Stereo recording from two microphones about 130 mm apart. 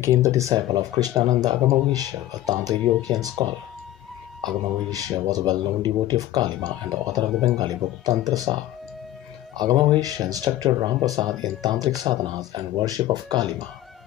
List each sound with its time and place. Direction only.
0.0 s speech: 20° right (ahead or behind)
4.9 s speech: 30° right (ahead or behind)
9.6 s speech: 30° right (ahead or behind)